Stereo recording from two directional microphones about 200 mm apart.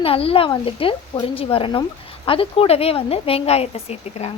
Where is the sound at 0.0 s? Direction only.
30° left (ahead or behind).